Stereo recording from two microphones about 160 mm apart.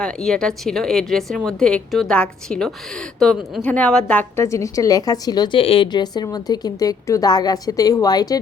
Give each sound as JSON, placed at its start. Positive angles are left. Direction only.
{"t": 0.0, "sound": "a woman's voice", "side_deg": 5}